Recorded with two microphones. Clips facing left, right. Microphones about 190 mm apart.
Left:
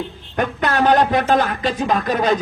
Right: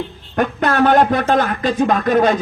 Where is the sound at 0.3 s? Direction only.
50° right (ahead or behind).